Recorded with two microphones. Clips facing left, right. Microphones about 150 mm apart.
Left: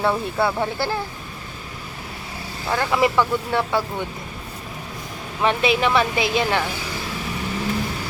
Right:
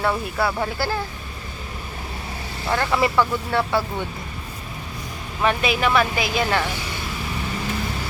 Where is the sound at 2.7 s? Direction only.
10° left (ahead or behind).